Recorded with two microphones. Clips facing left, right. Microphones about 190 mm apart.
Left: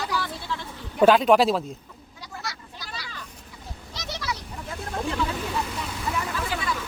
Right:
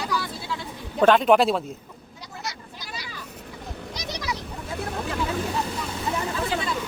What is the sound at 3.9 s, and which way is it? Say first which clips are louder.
Goat: even; 15° right (ahead or behind).